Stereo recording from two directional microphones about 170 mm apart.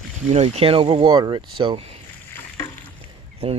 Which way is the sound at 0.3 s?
40° right (ahead or behind).